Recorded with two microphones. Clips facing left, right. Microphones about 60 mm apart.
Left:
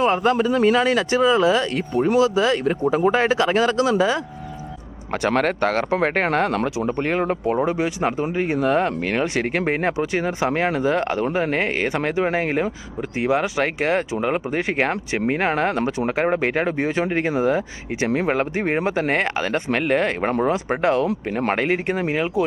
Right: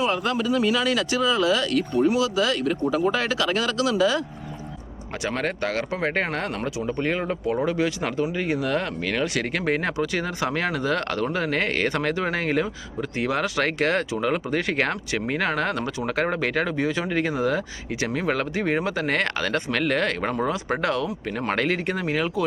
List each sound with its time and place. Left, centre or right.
0.0 s speech: left
5.2 s speech: left
6.8 s speech: left
7.5 s speech: left